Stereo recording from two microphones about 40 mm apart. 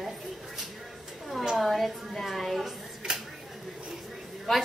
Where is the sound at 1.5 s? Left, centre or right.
Centre.